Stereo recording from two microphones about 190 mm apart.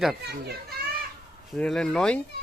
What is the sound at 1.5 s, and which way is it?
Speech, 5° left (ahead or behind).